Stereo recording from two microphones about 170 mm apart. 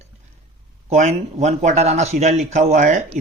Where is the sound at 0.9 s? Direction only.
45° right (ahead or behind).